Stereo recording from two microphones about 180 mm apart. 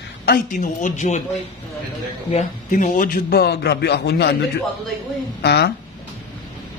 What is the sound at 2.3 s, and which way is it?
A man's voice, 45° left (ahead or behind).